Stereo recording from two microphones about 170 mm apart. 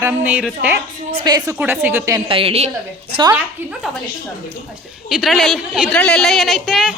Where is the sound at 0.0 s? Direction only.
10° right (ahead or behind).